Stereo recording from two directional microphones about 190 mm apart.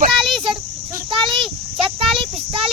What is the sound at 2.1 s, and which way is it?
Child singing, 25° right (ahead or behind).